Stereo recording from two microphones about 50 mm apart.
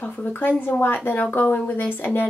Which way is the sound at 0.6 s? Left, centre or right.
Left.